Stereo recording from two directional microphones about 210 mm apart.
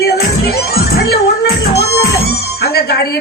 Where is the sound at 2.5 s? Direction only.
50° left (ahead or behind).